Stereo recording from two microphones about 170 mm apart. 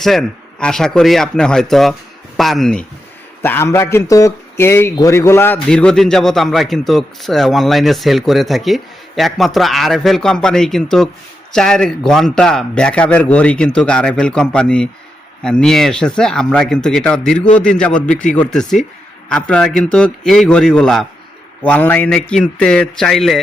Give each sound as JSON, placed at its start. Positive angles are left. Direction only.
{"t": 0.0, "sound": "a man's voice", "side_deg": 0}
{"t": 3.4, "sound": "a man's voice", "side_deg": 15}
{"t": 18.0, "sound": "speech", "side_deg": 45}
{"t": 18.3, "sound": "a man's voice", "side_deg": 5}